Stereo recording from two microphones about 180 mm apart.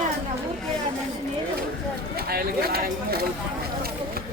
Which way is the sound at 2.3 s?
60° right (ahead or behind).